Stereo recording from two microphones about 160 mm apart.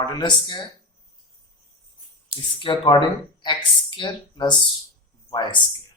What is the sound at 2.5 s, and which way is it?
Speech, 30° left (ahead or behind).